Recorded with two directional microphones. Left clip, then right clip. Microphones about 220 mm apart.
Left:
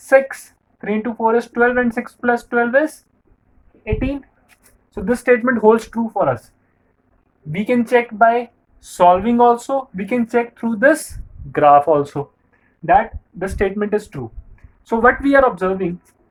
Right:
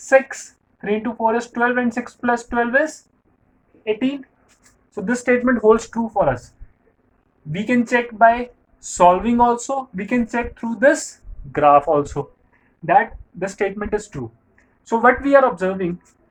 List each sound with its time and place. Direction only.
0.0 s a woman's voice: 20° left (ahead or behind)
5.0 s speech: 30° left (ahead or behind)
7.5 s speech: 30° left (ahead or behind)
13.4 s speech: 30° left (ahead or behind)